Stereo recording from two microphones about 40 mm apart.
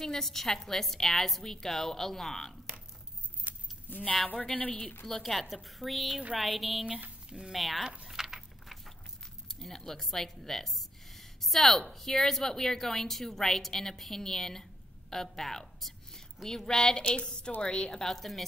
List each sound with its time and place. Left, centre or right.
0.0 s a woman's voice: centre
3.5 s a sound: right
3.9 s a woman's voice: left
4.6 s speech: left
5.0 s a woman's voice: centre
7.2 s speech: centre
7.5 s a woman's voice: centre
8.1 s a sound: centre
9.5 s a woman's voice: centre